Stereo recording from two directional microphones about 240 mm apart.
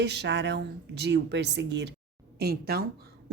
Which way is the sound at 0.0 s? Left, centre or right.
Right.